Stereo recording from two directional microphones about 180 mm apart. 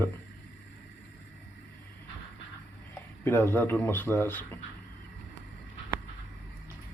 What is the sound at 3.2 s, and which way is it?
Speech, 10° left (ahead or behind).